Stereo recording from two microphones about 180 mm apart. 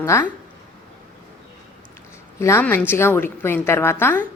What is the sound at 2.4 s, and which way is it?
A woman's voice, 15° left (ahead or behind).